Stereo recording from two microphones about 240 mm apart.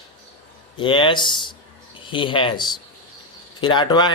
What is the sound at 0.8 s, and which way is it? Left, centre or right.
Speech, centre.